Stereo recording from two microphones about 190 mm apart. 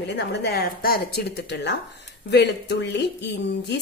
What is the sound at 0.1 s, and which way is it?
A woman's voice, 60° left (ahead or behind).